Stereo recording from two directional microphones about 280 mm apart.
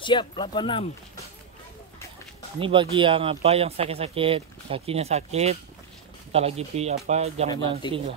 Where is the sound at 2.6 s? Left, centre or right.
Centre.